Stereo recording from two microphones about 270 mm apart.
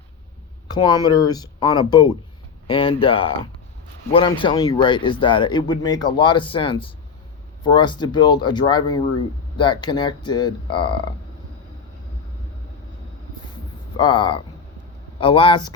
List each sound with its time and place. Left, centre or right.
0.7 s speech: centre
13.9 s speech: centre